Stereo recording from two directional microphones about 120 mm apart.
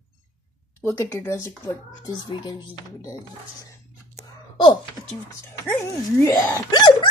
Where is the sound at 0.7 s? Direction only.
20° left (ahead or behind).